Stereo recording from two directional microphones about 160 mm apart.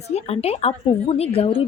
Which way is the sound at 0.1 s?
40° left (ahead or behind).